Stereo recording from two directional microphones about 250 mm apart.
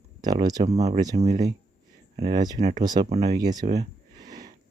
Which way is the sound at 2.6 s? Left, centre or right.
Right.